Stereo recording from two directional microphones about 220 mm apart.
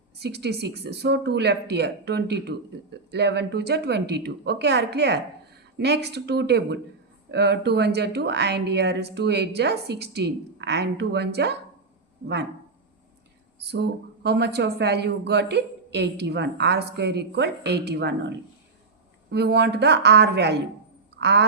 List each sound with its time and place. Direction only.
0.2 s speech: 50° right (ahead or behind)
13.6 s speech: 50° right (ahead or behind)